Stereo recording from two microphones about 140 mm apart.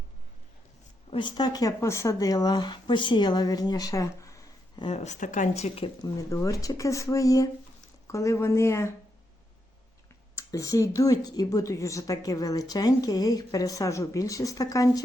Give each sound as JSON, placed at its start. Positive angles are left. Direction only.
{"t": 1.1, "sound": "a woman's voice", "side_deg": 30}
{"t": 4.8, "sound": "speech", "side_deg": 45}
{"t": 6.0, "sound": "a woman's voice", "side_deg": 25}
{"t": 10.3, "sound": "a woman's voice", "side_deg": 25}